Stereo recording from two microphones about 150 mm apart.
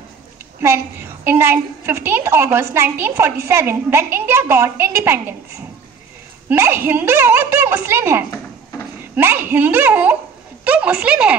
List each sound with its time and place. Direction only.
0.6 s a woman's voice: 15° right (ahead or behind)
6.5 s a woman's voice: 15° right (ahead or behind)